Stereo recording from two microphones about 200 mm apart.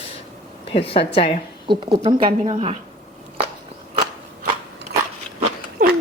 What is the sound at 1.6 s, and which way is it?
Speech, 25° right (ahead or behind).